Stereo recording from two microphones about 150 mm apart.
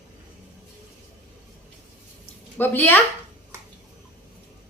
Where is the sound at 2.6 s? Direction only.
15° left (ahead or behind).